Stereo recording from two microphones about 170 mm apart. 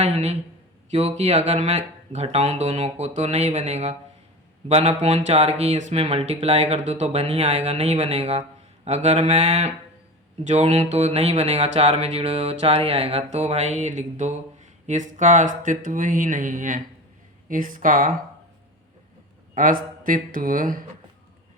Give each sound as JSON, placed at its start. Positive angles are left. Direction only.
{"t": 0.0, "sound": "a sound", "side_deg": -40}
{"t": 0.9, "sound": "speech", "side_deg": -40}
{"t": 19.5, "sound": "speech", "side_deg": -55}